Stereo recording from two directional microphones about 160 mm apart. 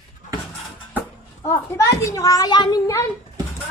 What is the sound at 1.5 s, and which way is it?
A child's voice, 20° left (ahead or behind).